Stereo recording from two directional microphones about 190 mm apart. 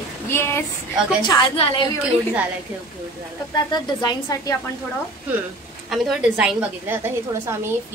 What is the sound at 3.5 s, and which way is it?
Speech, 20° left (ahead or behind).